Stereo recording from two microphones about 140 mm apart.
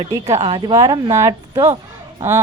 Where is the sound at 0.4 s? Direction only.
35° right (ahead or behind).